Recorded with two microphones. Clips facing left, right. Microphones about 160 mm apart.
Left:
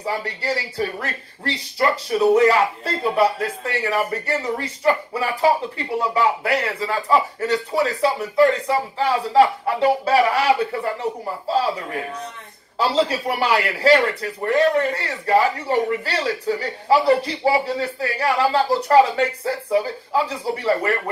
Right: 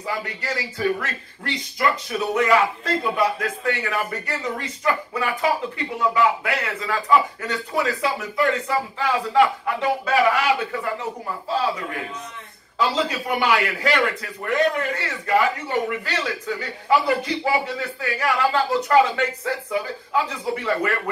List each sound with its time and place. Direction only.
0.0 s a man's voice: 35° left (ahead or behind)
12.7 s a man's voice: 35° left (ahead or behind)